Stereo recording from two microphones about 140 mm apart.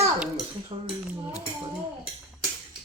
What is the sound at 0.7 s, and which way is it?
Cutlery, 35° right (ahead or behind).